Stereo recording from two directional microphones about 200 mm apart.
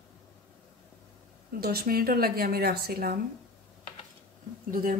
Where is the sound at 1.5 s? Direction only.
50° right (ahead or behind).